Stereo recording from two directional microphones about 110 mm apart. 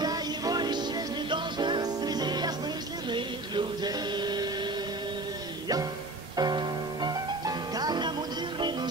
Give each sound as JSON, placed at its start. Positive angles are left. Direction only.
{"t": 0.0, "sound": "music", "side_deg": -35}
{"t": 6.3, "sound": "music", "side_deg": -40}